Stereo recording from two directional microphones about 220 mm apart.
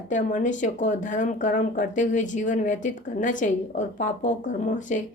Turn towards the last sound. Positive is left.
turn(degrees=35)  # may be behind; listen again after turning